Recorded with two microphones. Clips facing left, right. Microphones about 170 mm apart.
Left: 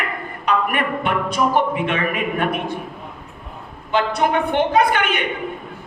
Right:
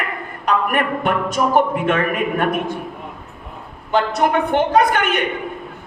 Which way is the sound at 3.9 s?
45° right (ahead or behind).